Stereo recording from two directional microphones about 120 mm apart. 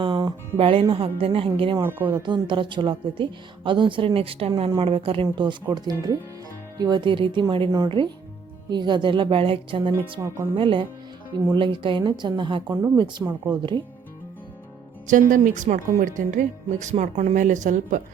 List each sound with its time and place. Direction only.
0.0 s music: 40° right (ahead or behind)
0.5 s a woman's voice: 50° right (ahead or behind)
1.8 s speech: 20° right (ahead or behind)
2.2 s a woman's voice: 45° right (ahead or behind)
5.7 s a woman's voice: 35° right (ahead or behind)
10.2 s speech: 25° right (ahead or behind)
10.6 s a woman's voice: 45° right (ahead or behind)
15.0 s a woman's voice: 90° right
16.8 s a woman's voice: 75° right (ahead or behind); by 18.0 s 90° right